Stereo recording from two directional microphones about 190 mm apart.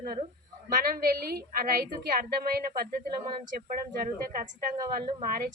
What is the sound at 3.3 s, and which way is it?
A woman's voice, 45° right (ahead or behind).